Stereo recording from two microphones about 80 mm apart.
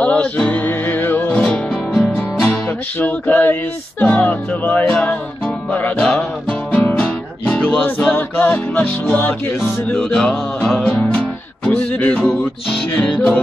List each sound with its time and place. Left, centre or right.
0.0 s music: centre
3.0 s music: left
6.7 s guitar: centre
7.8 s music: left
9.9 s music: centre
12.2 s music: centre
12.9 s music: centre